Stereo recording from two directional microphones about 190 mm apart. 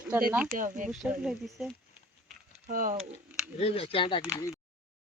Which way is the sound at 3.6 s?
30° left (ahead or behind).